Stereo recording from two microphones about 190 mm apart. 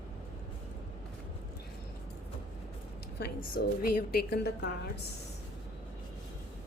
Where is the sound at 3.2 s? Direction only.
50° left (ahead or behind).